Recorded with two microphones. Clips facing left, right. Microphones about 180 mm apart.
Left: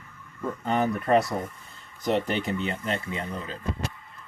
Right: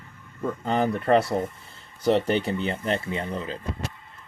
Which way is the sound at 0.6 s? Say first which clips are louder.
Right 2 dB; 30° right (ahead or behind).